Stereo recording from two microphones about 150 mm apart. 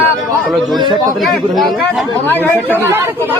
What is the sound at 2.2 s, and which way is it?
Speech, 15° left (ahead or behind).